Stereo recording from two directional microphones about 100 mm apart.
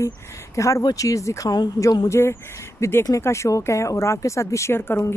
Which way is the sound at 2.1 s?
25° left (ahead or behind).